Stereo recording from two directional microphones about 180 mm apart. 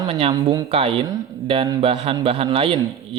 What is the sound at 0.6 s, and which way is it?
A man's voice, 30° right (ahead or behind).